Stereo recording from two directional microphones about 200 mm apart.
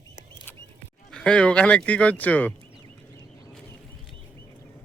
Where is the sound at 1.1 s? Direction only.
5° left (ahead or behind).